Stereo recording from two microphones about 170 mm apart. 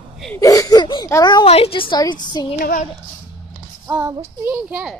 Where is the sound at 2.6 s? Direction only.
55° left (ahead or behind).